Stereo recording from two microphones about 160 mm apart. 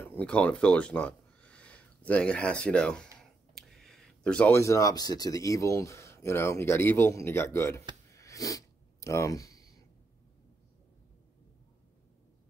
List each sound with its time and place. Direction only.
0.0 s speech: 10° left (ahead or behind)
8.1 s sneeze: 20° left (ahead or behind)